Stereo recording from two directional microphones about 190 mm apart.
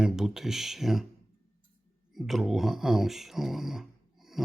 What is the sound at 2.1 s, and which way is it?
Speech, centre (ahead or behind).